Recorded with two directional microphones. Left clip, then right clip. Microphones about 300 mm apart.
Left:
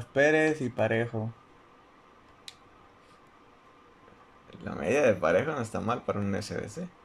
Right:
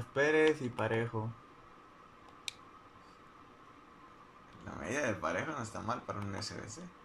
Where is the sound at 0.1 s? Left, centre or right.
Left.